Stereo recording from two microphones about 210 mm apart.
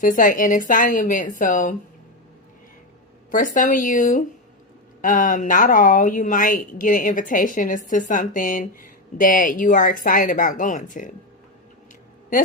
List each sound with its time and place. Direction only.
0.0 s speech: 40° left (ahead or behind)
3.3 s speech: 40° left (ahead or behind)